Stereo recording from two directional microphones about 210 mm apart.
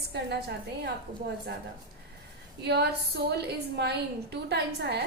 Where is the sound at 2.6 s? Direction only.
50° right (ahead or behind).